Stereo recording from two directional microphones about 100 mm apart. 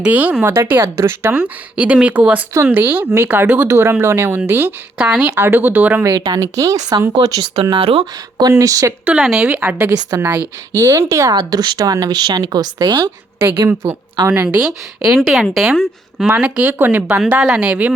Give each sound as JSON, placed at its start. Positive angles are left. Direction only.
{"t": 0.0, "sound": "speech", "side_deg": -15}
{"t": 0.4, "sound": "speech", "side_deg": -25}
{"t": 4.9, "sound": "speech", "side_deg": -10}
{"t": 5.4, "sound": "speech", "side_deg": -20}
{"t": 6.1, "sound": "speech", "side_deg": -40}
{"t": 7.5, "sound": "speech", "side_deg": -65}
{"t": 8.4, "sound": "speech", "side_deg": -35}
{"t": 9.2, "sound": "a woman's voice", "side_deg": -5}
{"t": 9.5, "sound": "speech", "side_deg": -15}
{"t": 13.4, "sound": "speech", "side_deg": -25}
{"t": 14.4, "sound": "a woman's voice", "side_deg": -10}
{"t": 16.2, "sound": "speech", "side_deg": -10}
{"t": 17.2, "sound": "speech", "side_deg": -10}